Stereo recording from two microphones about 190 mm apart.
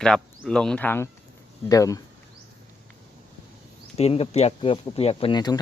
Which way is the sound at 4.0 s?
30° left (ahead or behind).